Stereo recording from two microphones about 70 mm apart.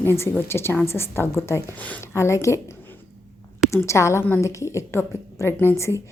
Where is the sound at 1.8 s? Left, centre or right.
Left.